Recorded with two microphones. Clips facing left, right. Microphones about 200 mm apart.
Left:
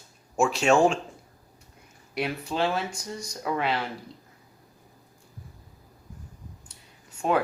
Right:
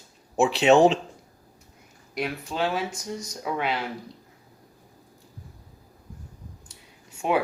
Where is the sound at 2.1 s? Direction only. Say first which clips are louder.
Left 1 dB; centre (ahead or behind).